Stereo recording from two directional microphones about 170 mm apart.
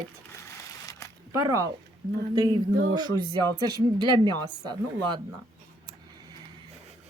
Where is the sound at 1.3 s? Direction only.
20° right (ahead or behind).